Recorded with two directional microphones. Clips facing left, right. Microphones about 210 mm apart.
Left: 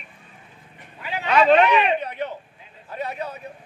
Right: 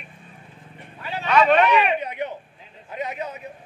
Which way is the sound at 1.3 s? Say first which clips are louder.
Left 1 dB; 30° left (ahead or behind).